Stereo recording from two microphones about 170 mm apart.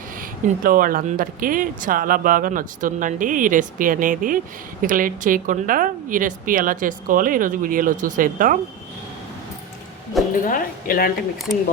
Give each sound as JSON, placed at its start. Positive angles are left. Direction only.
{"t": 0.2, "sound": "speech", "side_deg": -55}
{"t": 10.4, "sound": "speech", "side_deg": 55}